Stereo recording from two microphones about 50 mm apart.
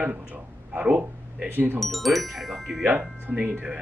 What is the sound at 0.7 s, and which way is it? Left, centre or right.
Speech, right.